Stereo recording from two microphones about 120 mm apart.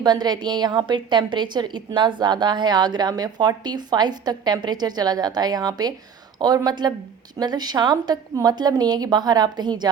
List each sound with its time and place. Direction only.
0.0 s a woman's voice: 35° right (ahead or behind)